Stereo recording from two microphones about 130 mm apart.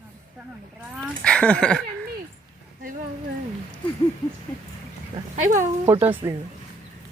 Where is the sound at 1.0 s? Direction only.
5° left (ahead or behind).